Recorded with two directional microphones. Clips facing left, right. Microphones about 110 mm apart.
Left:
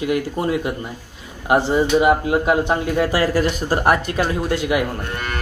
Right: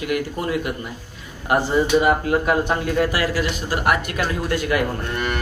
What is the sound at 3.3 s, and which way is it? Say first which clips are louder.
Speech: left 4 dB; 40° left (ahead or behind).